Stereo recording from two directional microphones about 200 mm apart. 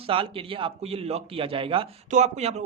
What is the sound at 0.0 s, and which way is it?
Speech, 25° right (ahead or behind).